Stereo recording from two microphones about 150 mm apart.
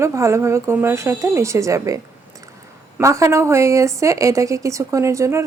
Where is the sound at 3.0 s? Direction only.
20° right (ahead or behind).